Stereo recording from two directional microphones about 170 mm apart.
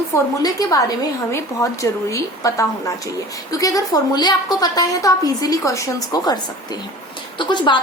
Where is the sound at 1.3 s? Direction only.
15° left (ahead or behind).